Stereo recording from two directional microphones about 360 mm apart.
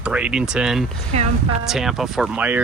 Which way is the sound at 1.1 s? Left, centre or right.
Centre.